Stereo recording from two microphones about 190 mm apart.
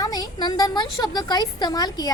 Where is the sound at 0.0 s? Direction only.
20° left (ahead or behind).